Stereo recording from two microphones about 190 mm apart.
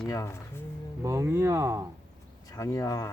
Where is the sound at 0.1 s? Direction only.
15° left (ahead or behind).